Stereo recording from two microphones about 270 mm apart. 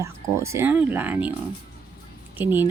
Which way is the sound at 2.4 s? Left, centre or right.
Centre.